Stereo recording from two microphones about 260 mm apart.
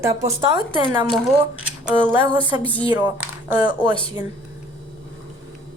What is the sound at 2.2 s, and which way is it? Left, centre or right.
Speech, centre.